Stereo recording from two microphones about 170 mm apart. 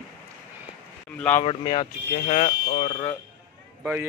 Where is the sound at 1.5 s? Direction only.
30° left (ahead or behind).